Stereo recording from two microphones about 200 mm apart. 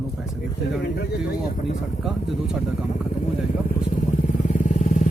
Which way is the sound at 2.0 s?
5° right (ahead or behind).